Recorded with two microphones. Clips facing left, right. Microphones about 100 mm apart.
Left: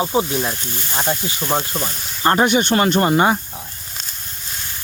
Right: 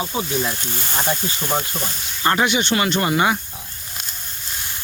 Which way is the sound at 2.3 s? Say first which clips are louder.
Left 4 dB; 45° left (ahead or behind).